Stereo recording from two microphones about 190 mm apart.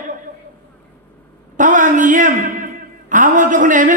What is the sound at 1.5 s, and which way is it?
Speech, 40° right (ahead or behind).